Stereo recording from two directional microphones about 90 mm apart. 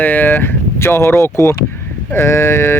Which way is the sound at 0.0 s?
15° left (ahead or behind).